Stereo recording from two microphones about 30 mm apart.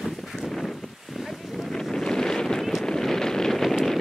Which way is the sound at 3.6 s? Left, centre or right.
Centre.